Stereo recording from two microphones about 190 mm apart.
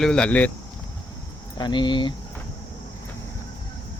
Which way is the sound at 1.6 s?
25° left (ahead or behind).